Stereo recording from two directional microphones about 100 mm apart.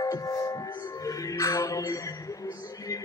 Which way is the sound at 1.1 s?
35° left (ahead or behind).